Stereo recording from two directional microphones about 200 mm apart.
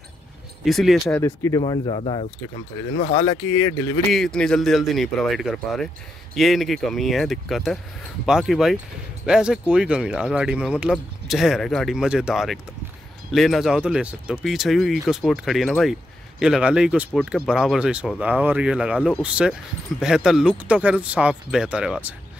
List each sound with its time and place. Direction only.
0.7 s speech: centre (ahead or behind)
1.2 s speech: 15° left (ahead or behind)
1.6 s speech: 30° left (ahead or behind)
4.1 s speech: 5° left (ahead or behind)